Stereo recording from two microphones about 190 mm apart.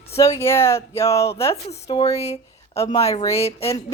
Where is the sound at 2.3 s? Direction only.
30° left (ahead or behind).